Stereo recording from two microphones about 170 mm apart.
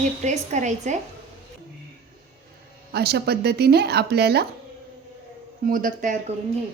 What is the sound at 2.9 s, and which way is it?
Speech, 65° right (ahead or behind).